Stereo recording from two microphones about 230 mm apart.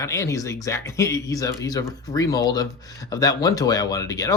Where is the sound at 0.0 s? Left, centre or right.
Centre.